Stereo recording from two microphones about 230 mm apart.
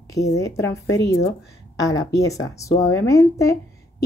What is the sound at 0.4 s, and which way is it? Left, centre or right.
A woman's voice, centre.